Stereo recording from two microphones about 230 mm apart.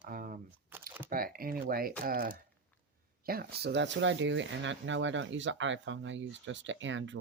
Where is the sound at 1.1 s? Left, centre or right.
Right.